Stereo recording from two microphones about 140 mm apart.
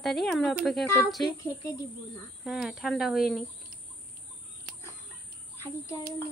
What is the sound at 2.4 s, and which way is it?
A woman's voice, centre (ahead or behind).